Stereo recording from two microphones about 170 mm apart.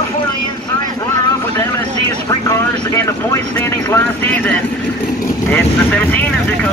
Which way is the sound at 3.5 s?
15° left (ahead or behind).